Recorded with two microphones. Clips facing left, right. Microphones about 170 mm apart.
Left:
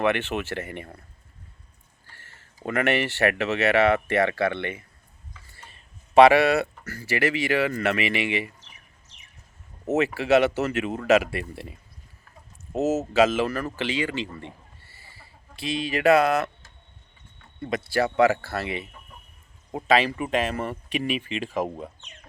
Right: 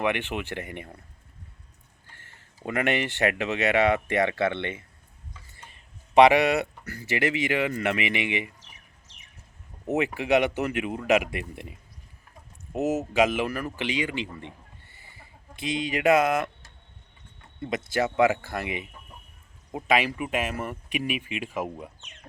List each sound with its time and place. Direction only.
0.0 s speech: 15° right (ahead or behind)
2.1 s a sound: 20° right (ahead or behind)
2.6 s speech: 15° right (ahead or behind)
9.9 s speech: 15° right (ahead or behind)
12.8 s speech: 15° right (ahead or behind)
17.6 s speech: 20° right (ahead or behind)
19.9 s speech: 10° right (ahead or behind)
21.5 s speech: 35° left (ahead or behind)